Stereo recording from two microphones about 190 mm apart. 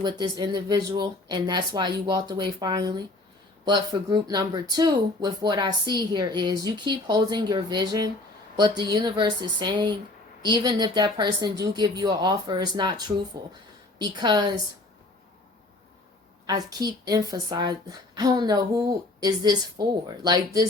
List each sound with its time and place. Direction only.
0.0 s speech: 20° right (ahead or behind)
14.0 s speech: 20° right (ahead or behind)
16.5 s speech: 20° right (ahead or behind)